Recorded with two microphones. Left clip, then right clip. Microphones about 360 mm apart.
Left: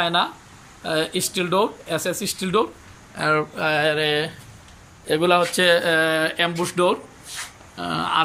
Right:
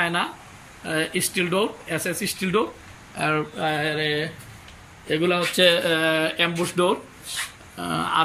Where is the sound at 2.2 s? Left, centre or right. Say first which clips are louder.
Even; left.